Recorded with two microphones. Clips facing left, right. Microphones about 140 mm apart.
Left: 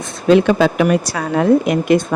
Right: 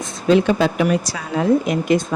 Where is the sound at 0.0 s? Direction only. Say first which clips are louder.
Left 3 dB; 65° left (ahead or behind).